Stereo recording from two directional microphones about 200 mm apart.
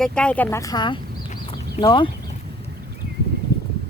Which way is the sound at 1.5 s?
25° left (ahead or behind).